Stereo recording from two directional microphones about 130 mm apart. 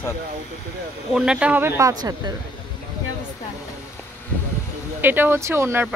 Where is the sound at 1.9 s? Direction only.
30° right (ahead or behind).